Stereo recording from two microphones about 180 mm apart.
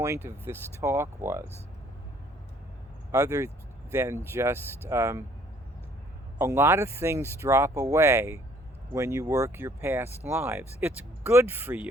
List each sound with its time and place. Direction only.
0.0 s speech: 15° right (ahead or behind)
3.1 s speech: 15° right (ahead or behind)
6.4 s speech: 15° right (ahead or behind)